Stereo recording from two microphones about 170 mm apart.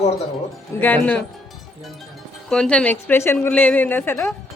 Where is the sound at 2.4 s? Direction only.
5° left (ahead or behind).